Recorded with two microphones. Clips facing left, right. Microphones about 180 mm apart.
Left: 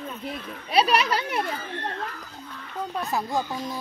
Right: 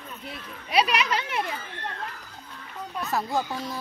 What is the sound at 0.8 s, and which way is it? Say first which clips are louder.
Speech: left 3 dB; 35° left (ahead or behind).